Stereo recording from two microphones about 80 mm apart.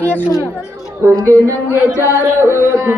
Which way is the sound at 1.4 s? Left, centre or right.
Right.